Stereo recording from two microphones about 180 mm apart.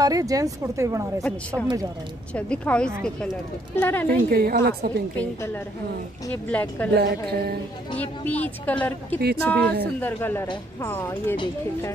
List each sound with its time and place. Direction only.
0.0 s speech: 20° right (ahead or behind)
2.3 s speech: 5° left (ahead or behind)
4.3 s a woman's voice: 55° right (ahead or behind)
5.1 s speech: 10° left (ahead or behind)
6.9 s a woman's voice: 65° right (ahead or behind)
8.0 s speech: 10° left (ahead or behind)
11.3 s speech: 25° left (ahead or behind)